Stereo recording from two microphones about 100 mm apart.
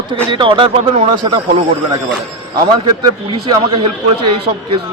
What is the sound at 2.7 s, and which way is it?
Speech, 45° right (ahead or behind).